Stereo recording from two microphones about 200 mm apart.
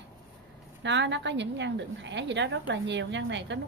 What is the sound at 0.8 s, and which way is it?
A woman's voice, 65° right (ahead or behind).